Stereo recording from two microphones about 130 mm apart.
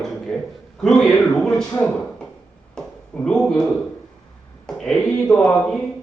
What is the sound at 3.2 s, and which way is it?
Speech, 5° left (ahead or behind).